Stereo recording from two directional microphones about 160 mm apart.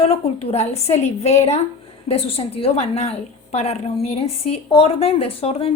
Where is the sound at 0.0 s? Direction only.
40° left (ahead or behind).